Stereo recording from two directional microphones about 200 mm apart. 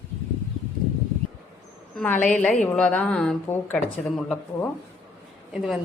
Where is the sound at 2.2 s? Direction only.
5° left (ahead or behind).